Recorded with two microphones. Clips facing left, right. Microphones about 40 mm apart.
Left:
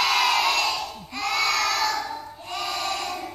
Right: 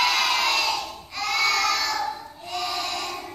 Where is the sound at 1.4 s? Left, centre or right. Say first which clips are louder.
Right 1 dB; centre.